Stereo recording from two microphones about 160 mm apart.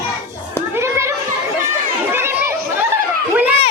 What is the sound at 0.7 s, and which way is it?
Children playing, 15° right (ahead or behind).